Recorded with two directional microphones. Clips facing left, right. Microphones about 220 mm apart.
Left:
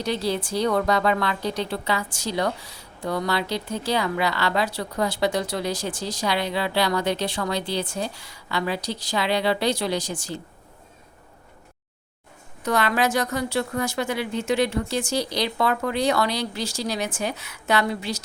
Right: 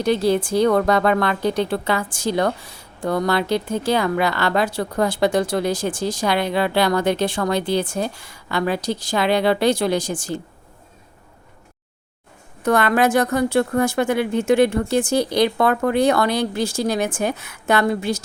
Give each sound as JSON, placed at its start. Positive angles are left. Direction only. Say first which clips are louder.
{"t": 0.0, "sound": "speech", "louder": "right 7 dB", "side_deg": -50}
{"t": 12.6, "sound": "speech", "louder": "right 5 dB", "side_deg": -55}